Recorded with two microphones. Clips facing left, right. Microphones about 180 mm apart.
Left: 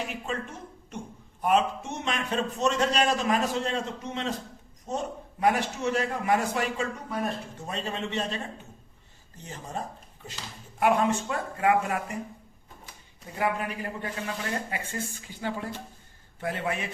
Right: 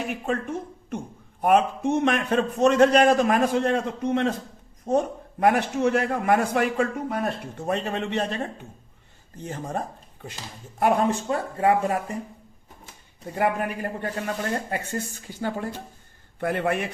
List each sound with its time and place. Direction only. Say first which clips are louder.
0.1 s a man's voice: right 7 dB; 55° right (ahead or behind)
9.4 s a man's voice: right 6 dB; 55° right (ahead or behind)
10.8 s speech: right 2 dB; 40° right (ahead or behind)
13.3 s a woman's voice: right 4 dB; 50° right (ahead or behind)